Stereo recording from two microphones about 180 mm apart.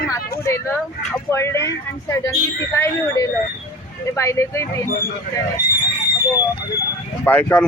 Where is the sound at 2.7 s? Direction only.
15° left (ahead or behind).